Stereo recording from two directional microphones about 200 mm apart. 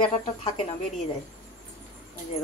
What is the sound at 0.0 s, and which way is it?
Speech, 30° left (ahead or behind).